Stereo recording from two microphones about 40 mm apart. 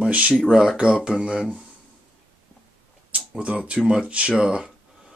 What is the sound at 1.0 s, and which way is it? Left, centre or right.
Speech, right.